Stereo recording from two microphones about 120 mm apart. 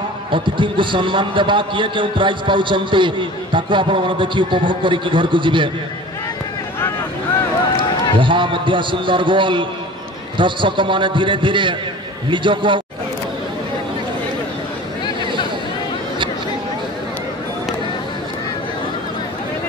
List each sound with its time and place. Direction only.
0.3 s a man's voice: 45° right (ahead or behind)
7.7 s a man's voice: 45° right (ahead or behind)